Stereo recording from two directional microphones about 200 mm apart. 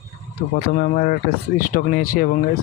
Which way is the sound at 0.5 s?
50° left (ahead or behind).